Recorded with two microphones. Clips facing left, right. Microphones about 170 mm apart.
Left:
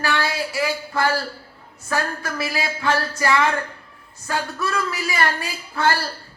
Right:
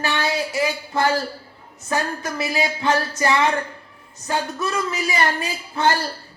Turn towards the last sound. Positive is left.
turn(degrees=-20)  # may be behind; listen again after turning